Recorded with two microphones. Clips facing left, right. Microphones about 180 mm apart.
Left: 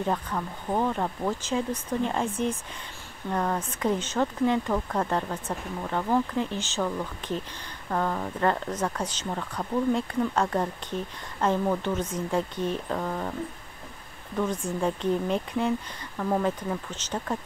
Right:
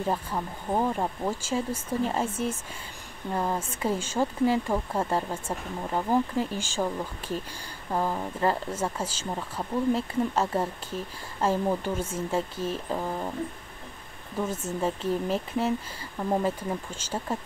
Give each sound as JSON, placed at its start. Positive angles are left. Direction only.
{"t": 0.0, "sound": "speech", "side_deg": -10}
{"t": 14.4, "sound": "speech", "side_deg": -5}
{"t": 16.2, "sound": "speech", "side_deg": -15}